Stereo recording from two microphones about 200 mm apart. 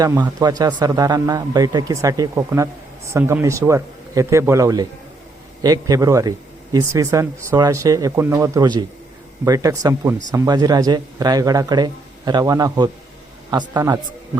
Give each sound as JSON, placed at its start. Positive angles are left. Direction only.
{"t": 0.0, "sound": "speech", "side_deg": -15}